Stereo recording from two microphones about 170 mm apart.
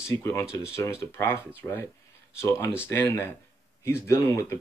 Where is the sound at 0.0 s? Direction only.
15° left (ahead or behind).